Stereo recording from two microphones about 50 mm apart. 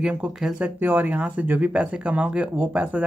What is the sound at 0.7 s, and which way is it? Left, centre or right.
Speech, right.